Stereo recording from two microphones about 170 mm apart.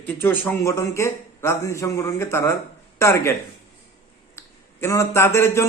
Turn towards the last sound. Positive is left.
turn(degrees=15)  # may be behind; listen again after turning